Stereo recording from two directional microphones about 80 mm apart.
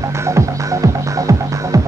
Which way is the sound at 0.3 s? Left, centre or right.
Right.